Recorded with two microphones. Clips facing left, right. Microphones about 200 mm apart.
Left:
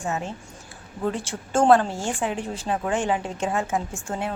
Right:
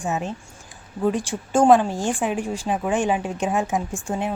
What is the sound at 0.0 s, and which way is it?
Speech, 15° right (ahead or behind).